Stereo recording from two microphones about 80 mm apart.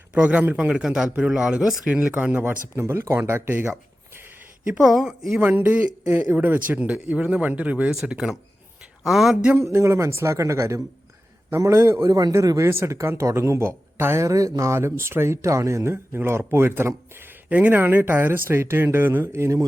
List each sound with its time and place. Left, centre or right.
0.1 s a man's voice: centre
2.1 s a man's voice: right
3.5 s a sound: right
4.6 s a man's voice: centre
5.4 s speech: right; by 9.5 s centre
9.6 s a man's voice: right
17.5 s speech: centre; by 19.6 s right